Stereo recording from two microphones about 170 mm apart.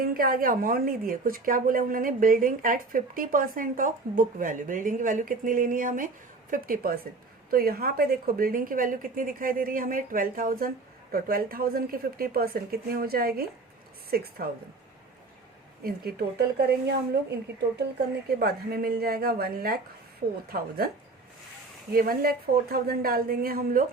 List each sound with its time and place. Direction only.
0.0 s a woman's voice: 60° right (ahead or behind)
15.8 s speech: 65° right (ahead or behind)
18.3 s a woman's voice: 65° right (ahead or behind)
21.9 s a woman's voice: 60° right (ahead or behind)